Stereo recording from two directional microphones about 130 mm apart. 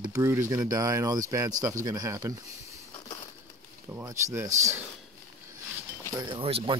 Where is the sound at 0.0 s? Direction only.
25° right (ahead or behind).